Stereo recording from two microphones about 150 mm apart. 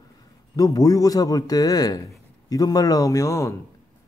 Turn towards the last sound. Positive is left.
turn(degrees=20)  # may be behind; listen again after turning